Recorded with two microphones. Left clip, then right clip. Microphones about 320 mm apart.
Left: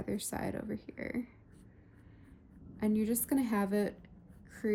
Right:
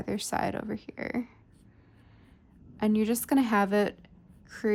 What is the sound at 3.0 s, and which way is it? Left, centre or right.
Speech, centre.